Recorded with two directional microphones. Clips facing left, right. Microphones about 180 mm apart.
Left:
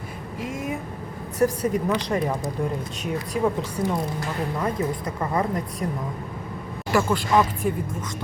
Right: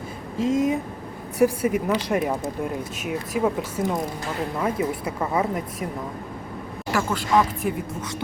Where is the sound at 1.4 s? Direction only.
10° right (ahead or behind).